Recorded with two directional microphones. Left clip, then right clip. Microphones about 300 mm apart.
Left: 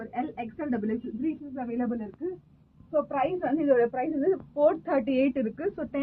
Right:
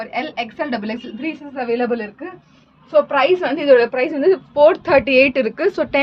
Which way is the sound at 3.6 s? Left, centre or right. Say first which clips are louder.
Right 11 dB; right.